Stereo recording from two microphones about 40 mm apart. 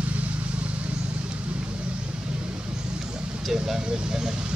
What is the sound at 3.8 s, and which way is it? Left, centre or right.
Vehicle, right.